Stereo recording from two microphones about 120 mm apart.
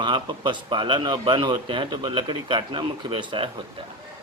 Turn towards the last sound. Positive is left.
turn(degrees=-45)  # may be behind; listen again after turning